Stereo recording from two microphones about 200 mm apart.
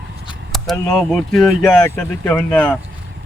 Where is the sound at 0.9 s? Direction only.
5° left (ahead or behind).